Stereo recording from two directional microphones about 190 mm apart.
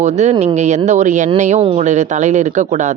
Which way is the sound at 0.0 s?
35° right (ahead or behind).